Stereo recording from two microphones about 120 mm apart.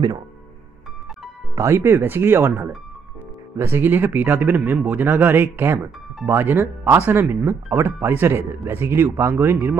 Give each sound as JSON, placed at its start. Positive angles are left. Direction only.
{"t": 1.5, "sound": "speech", "side_deg": -25}